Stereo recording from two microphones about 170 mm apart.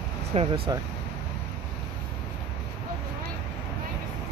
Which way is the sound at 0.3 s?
35° right (ahead or behind).